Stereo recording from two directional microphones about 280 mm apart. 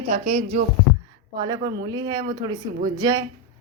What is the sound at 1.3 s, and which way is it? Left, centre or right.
Speech, centre.